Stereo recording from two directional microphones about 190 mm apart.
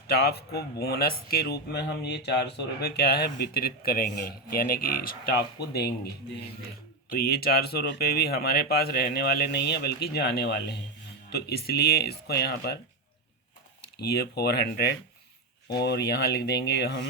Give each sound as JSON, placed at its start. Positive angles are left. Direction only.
{"t": 0.1, "sound": "speech", "side_deg": 55}
{"t": 7.1, "sound": "speech", "side_deg": 55}
{"t": 13.8, "sound": "speech", "side_deg": 55}